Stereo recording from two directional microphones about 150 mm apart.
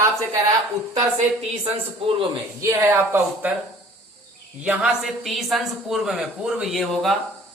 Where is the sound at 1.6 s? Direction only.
40° right (ahead or behind).